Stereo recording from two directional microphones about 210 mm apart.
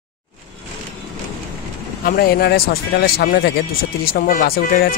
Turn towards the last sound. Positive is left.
turn(degrees=45)  # may be behind; listen again after turning